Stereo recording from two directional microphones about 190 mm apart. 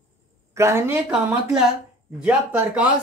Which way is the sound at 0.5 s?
15° right (ahead or behind).